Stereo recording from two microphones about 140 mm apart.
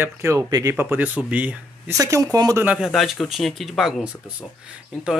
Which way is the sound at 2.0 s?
25° right (ahead or behind).